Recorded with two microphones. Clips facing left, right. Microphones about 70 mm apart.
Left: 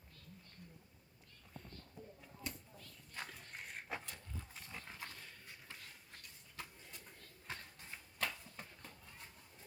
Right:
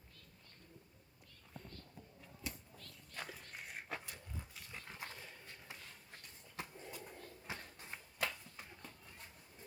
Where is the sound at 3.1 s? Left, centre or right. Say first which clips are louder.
Even; centre.